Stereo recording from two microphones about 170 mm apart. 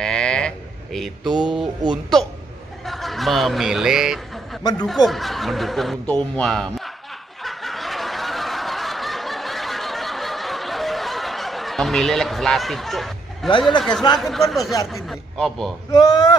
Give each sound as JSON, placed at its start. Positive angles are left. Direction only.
{"t": 0.0, "sound": "a sound", "side_deg": 5}
{"t": 0.9, "sound": "speech", "side_deg": 0}
{"t": 2.9, "sound": "speech", "side_deg": 0}
{"t": 7.4, "sound": "snicker", "side_deg": 0}
{"t": 13.7, "sound": "speech", "side_deg": 5}
{"t": 15.9, "sound": "speech", "side_deg": 25}